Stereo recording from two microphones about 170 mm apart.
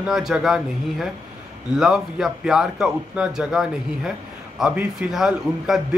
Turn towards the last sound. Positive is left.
turn(degrees=-5)  # may be behind; listen again after turning